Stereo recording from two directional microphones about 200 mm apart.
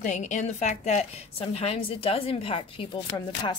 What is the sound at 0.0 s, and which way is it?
A woman's voice, 35° left (ahead or behind).